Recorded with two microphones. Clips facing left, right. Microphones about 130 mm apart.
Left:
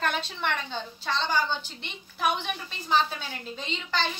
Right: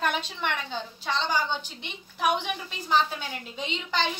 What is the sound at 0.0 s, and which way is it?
A woman's voice, 10° right (ahead or behind).